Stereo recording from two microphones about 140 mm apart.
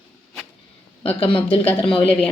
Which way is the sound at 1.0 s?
40° left (ahead or behind).